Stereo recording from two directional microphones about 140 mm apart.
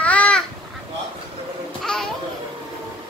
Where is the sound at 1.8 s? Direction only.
5° left (ahead or behind).